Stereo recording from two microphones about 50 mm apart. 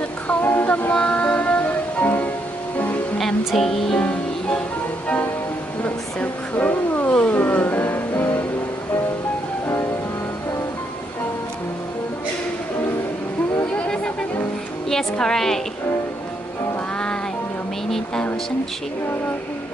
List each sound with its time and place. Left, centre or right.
0.4 s child singing: left
0.9 s music: left
3.2 s music: centre
3.9 s music: centre
6.5 s music: left
13.8 s music: centre
14.9 s a woman's voice: centre
17.8 s a woman's voice: centre